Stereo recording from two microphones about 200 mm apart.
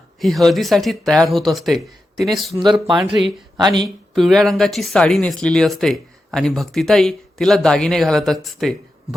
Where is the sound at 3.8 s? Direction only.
Centre (ahead or behind).